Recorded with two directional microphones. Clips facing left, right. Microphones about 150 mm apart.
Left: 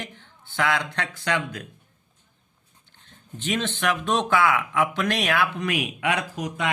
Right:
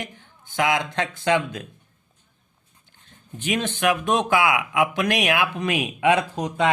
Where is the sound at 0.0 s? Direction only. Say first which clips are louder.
Right 3 dB; 15° right (ahead or behind).